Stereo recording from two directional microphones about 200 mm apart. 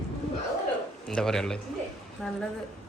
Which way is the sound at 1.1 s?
5° left (ahead or behind).